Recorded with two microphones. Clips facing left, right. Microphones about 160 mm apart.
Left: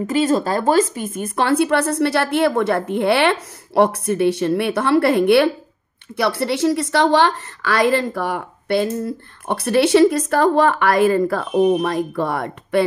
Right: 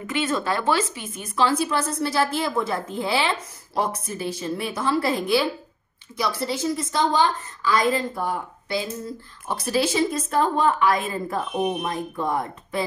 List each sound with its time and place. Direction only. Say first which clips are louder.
0.0 s a woman's voice: left 8 dB; 40° left (ahead or behind); by 12.8 s 80° left